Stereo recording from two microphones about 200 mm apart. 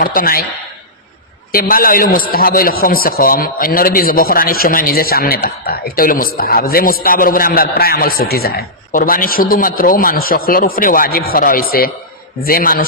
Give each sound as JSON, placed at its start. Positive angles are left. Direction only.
{"t": 0.0, "sound": "a man's voice", "side_deg": 45}
{"t": 1.5, "sound": "a man's voice", "side_deg": 45}